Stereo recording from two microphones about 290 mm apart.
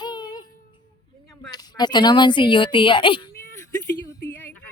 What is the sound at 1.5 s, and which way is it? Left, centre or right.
A woman's voice, centre.